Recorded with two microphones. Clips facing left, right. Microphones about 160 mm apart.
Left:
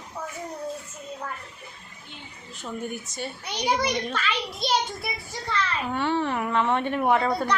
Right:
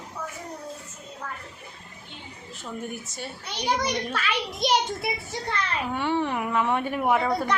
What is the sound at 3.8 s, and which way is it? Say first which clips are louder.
Speech: left 1 dB; centre (ahead or behind).